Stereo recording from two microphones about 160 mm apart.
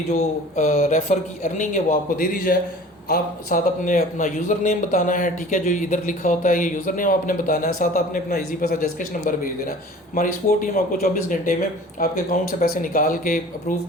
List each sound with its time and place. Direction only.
0.1 s a man's voice: 50° left (ahead or behind)